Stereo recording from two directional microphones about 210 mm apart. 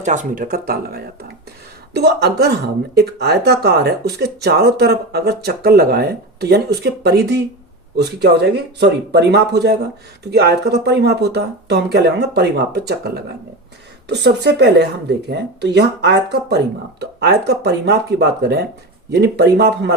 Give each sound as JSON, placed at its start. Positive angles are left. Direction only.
{"t": 0.0, "sound": "speech", "side_deg": -35}